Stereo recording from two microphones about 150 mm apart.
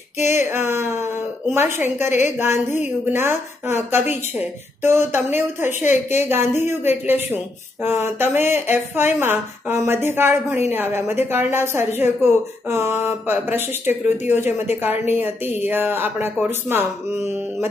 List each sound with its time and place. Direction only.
0.3 s a sound: 15° right (ahead or behind)
2.5 s a woman's voice: 50° left (ahead or behind)
3.1 s a woman's voice: 15° right (ahead or behind)